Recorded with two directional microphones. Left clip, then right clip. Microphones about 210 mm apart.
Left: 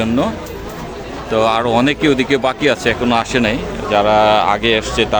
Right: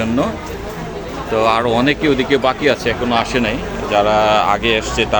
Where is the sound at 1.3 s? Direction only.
10° left (ahead or behind).